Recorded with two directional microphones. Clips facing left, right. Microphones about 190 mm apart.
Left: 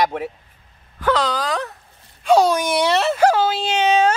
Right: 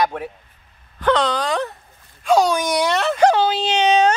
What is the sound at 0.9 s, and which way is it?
Speech, 5° left (ahead or behind).